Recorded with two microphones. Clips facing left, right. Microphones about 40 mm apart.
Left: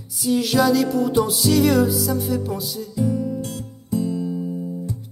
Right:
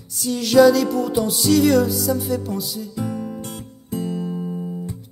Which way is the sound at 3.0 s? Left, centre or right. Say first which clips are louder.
Left 6 dB; right.